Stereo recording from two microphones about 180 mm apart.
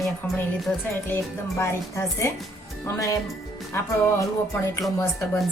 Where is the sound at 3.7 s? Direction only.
15° left (ahead or behind).